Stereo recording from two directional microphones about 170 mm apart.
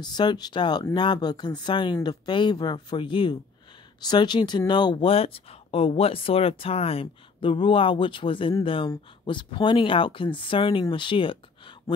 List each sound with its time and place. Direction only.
0.0 s speech: 25° left (ahead or behind)